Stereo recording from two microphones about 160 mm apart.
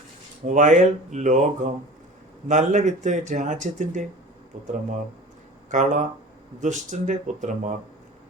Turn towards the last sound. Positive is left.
turn(degrees=-50)  # may be behind; listen again after turning